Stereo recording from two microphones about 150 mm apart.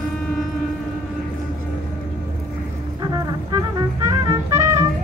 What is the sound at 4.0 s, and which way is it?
Music, 20° right (ahead or behind).